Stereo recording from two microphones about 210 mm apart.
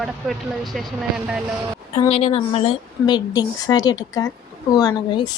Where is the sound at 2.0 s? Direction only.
30° left (ahead or behind).